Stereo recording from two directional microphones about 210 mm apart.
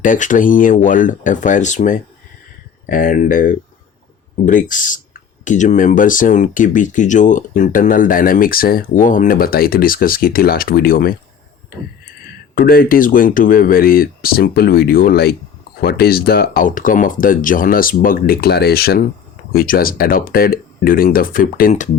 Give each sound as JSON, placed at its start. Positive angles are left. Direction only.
{"t": 0.0, "sound": "speech", "side_deg": 40}